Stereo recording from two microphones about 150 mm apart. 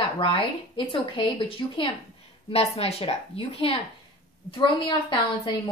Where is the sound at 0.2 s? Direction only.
35° left (ahead or behind).